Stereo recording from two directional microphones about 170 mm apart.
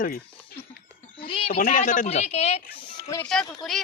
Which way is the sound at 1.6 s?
50° left (ahead or behind).